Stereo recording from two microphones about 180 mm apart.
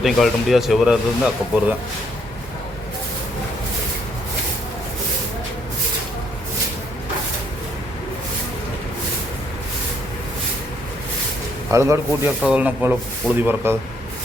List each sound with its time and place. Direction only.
0.0 s speech: centre (ahead or behind)
11.7 s speech: 15° right (ahead or behind)